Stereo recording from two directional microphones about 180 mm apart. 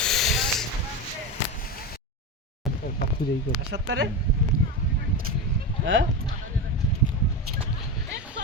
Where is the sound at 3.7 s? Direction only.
80° right.